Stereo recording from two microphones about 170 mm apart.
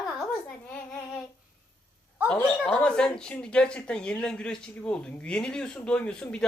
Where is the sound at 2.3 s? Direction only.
5° left (ahead or behind).